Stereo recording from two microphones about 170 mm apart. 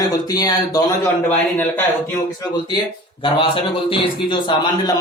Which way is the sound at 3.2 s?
30° left (ahead or behind).